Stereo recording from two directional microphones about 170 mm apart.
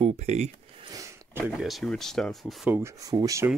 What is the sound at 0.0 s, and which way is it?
Speech, 40° right (ahead or behind).